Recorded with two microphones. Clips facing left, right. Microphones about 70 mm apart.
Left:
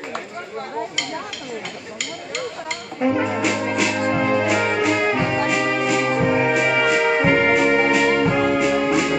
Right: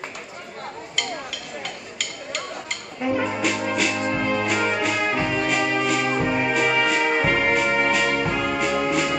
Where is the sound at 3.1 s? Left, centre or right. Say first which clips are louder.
Left 1 dB; centre.